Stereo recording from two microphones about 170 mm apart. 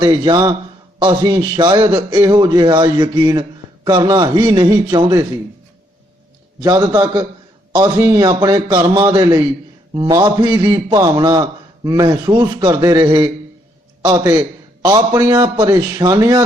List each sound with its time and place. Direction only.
0.0 s a man's voice: 20° right (ahead or behind)
6.6 s a man's voice: 20° right (ahead or behind)